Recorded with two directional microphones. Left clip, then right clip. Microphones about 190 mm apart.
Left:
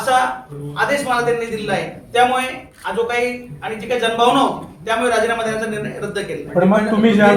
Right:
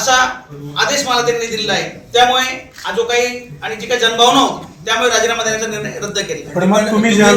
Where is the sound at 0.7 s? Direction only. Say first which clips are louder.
Right 3 dB; centre (ahead or behind); by 6.8 s 25° left (ahead or behind).